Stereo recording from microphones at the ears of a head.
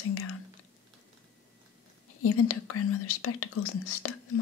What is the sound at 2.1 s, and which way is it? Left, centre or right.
Speech, left.